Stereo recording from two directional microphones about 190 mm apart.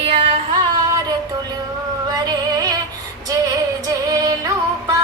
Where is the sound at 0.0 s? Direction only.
30° right (ahead or behind).